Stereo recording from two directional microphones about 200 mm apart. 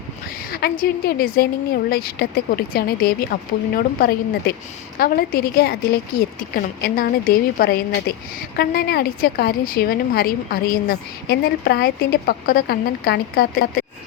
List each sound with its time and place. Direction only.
0.5 s a woman's voice: 50° left (ahead or behind)